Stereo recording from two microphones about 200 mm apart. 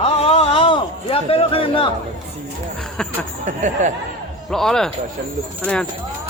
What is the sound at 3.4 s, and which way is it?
Speech, 40° right (ahead or behind).